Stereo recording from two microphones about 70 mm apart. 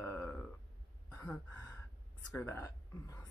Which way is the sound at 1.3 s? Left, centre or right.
Left.